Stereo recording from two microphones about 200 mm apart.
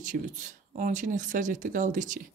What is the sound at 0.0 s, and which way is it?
Speech, 40° right (ahead or behind).